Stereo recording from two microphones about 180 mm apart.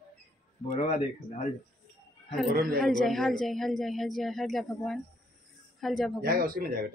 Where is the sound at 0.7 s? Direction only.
40° left (ahead or behind).